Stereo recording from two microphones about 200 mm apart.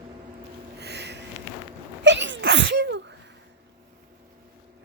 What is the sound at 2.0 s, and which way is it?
Sneeze, 65° right (ahead or behind).